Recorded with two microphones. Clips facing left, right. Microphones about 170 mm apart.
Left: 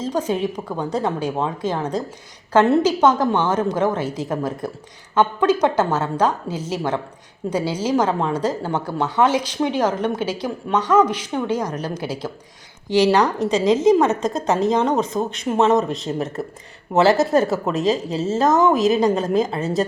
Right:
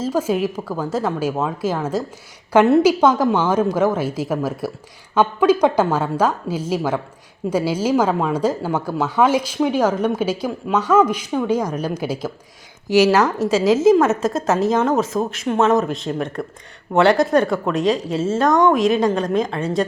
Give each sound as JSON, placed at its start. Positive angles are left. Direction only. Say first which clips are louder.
{"t": 0.0, "sound": "a woman's voice", "louder": "right 2 dB", "side_deg": -5}